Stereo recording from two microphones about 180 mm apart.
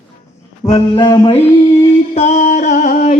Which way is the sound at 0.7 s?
25° left (ahead or behind).